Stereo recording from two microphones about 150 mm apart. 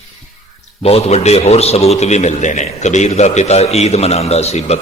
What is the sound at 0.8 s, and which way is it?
A man's voice, 45° left (ahead or behind).